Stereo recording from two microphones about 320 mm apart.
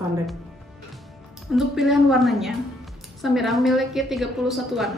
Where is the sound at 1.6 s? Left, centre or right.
Centre.